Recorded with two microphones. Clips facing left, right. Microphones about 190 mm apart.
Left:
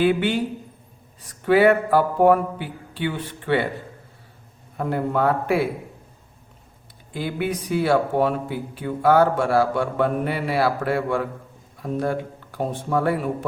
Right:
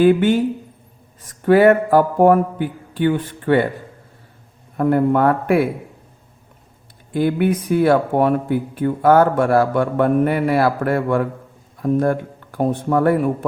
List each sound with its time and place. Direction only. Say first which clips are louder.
0.0 s speech: right 6 dB; 45° right (ahead or behind)
1.5 s speech: right 4 dB; 45° right (ahead or behind)
4.8 s speech: right 7 dB; 55° right (ahead or behind)
7.1 s speech: right 8 dB; 55° right (ahead or behind)